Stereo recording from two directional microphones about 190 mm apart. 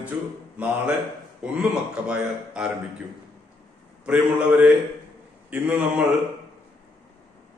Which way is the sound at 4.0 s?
5° right (ahead or behind).